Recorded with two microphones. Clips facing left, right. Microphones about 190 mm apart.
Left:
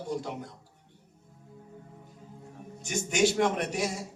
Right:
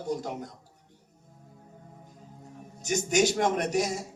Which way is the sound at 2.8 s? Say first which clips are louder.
Right 2 dB; 40° right (ahead or behind).